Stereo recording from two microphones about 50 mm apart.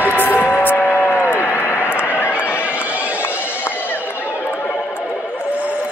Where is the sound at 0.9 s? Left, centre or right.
Left.